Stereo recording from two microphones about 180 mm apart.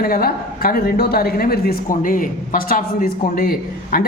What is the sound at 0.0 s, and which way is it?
A woman's voice, 55° left (ahead or behind).